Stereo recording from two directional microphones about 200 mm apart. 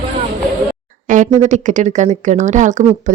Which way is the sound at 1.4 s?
35° right (ahead or behind).